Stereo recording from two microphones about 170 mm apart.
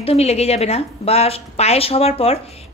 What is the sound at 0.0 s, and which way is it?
A woman's voice, 35° left (ahead or behind).